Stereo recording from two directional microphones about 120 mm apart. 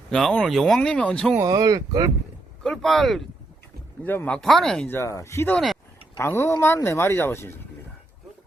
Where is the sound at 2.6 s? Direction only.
5° left (ahead or behind).